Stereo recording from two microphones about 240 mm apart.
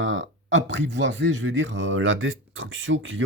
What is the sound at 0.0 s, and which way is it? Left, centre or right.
Speech, right.